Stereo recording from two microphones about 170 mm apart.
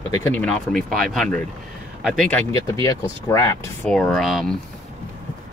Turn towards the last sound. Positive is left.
turn(degrees=0)  # may be behind; listen again after turning